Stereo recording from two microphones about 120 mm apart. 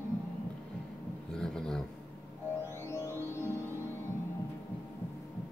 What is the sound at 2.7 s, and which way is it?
Music, 20° left (ahead or behind).